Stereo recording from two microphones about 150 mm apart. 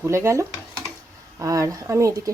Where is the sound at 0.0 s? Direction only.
20° right (ahead or behind).